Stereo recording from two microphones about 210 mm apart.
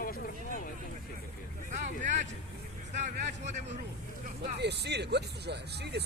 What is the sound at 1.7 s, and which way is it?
Speech, 35° right (ahead or behind).